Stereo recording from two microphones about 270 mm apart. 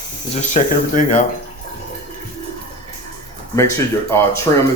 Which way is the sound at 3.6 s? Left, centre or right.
Centre.